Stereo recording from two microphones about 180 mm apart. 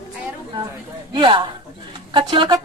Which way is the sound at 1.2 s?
25° right (ahead or behind).